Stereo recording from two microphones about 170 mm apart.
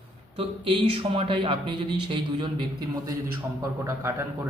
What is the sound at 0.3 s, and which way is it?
Speech, 35° right (ahead or behind).